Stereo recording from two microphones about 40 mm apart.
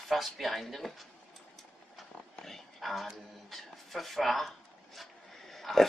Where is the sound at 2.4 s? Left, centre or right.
Centre.